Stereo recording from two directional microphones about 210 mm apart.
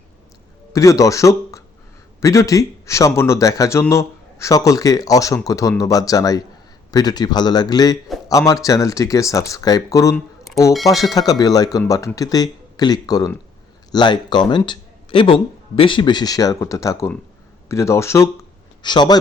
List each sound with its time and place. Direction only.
0.7 s a man's voice: 15° left (ahead or behind)